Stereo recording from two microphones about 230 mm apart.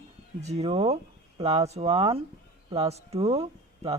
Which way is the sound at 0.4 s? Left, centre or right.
Right.